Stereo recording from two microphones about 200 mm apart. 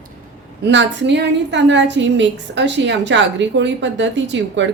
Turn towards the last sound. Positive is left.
turn(degrees=-65)  # may be behind; listen again after turning